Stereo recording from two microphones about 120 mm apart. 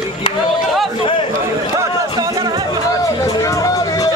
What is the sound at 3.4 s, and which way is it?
Music, 25° left (ahead or behind).